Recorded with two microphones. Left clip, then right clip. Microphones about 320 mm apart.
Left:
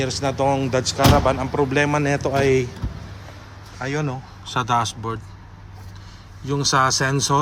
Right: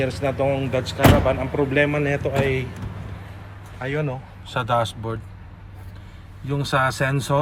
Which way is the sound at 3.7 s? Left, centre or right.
Centre.